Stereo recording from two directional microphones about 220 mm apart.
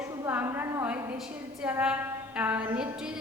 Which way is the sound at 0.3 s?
10° right (ahead or behind).